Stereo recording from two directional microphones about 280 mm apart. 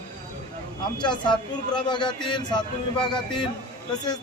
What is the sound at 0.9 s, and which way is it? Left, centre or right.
Speech, centre.